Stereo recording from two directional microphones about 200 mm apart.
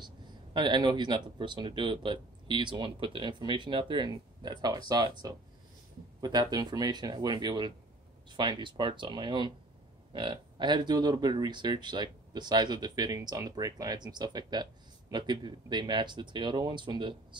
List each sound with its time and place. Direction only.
0.0 s speech: 25° right (ahead or behind)
6.2 s speech: 20° right (ahead or behind)